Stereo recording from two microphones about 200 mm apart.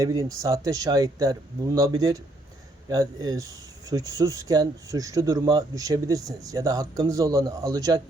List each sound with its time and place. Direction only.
0.0 s speech: 15° right (ahead or behind)